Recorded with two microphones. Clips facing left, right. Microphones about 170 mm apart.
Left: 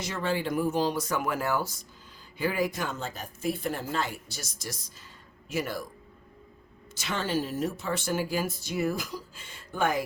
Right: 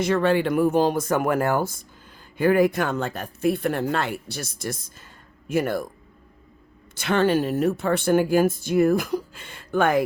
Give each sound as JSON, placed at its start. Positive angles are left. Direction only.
{"t": 0.0, "sound": "speech", "side_deg": -65}
{"t": 6.9, "sound": "speech", "side_deg": -60}